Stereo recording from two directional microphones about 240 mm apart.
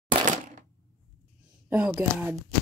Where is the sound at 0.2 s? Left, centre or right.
Right.